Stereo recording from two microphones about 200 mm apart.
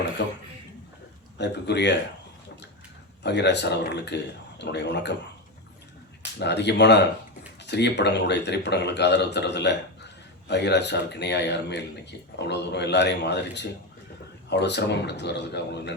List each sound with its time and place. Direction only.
0.2 s a man's voice: 60° left (ahead or behind)
1.4 s a man's voice: 60° left (ahead or behind)
3.2 s a man's voice: 60° left (ahead or behind)
6.4 s a man's voice: 60° left (ahead or behind)